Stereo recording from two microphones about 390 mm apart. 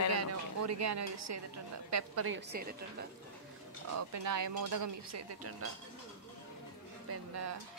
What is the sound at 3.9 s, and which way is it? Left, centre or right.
Speech, right.